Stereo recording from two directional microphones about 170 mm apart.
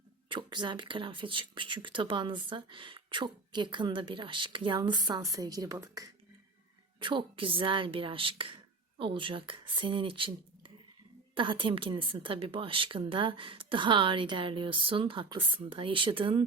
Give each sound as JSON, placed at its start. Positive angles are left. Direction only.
{"t": 0.3, "sound": "a woman's voice", "side_deg": -30}